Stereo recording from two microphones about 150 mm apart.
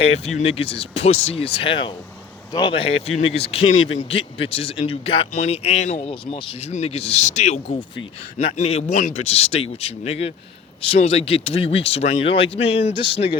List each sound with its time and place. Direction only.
0.0 s speech: 40° left (ahead or behind)